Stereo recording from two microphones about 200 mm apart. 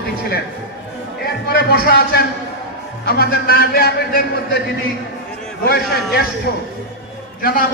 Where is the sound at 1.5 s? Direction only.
50° left (ahead or behind).